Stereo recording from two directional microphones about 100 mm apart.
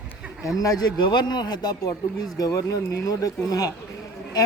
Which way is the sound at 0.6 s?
40° left (ahead or behind).